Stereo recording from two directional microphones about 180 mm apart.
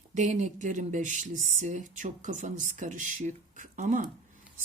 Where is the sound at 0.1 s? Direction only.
40° right (ahead or behind).